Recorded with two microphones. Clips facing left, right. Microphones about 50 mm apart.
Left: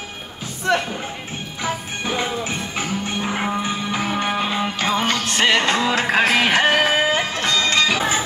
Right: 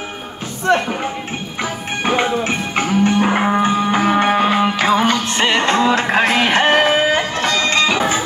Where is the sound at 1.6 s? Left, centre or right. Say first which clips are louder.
Right 4 dB; right.